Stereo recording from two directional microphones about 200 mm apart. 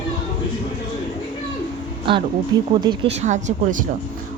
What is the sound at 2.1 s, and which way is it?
Speech, 25° right (ahead or behind).